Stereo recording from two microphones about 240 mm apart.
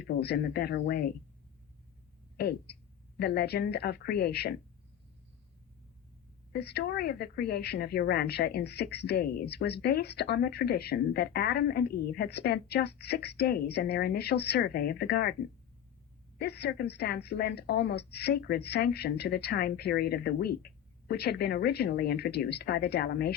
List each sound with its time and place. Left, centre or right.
0.0 s a woman's voice: left
2.4 s a woman's voice: left
6.5 s a woman's voice: left
16.4 s a woman's voice: left